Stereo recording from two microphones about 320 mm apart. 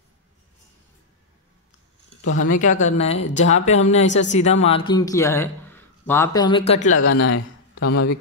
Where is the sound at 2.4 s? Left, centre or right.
Left.